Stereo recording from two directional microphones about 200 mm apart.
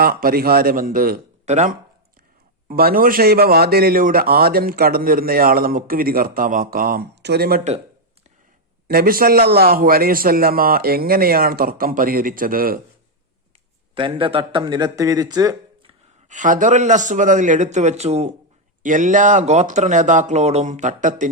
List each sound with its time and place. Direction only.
0.0 s a man's voice: 50° right (ahead or behind)
8.9 s a man's voice: 45° right (ahead or behind)
13.9 s a man's voice: 25° right (ahead or behind)
16.3 s speech: 40° right (ahead or behind)